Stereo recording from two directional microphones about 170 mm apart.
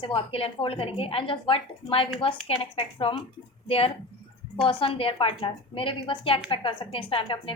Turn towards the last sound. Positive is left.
turn(degrees=30)  # may be behind; listen again after turning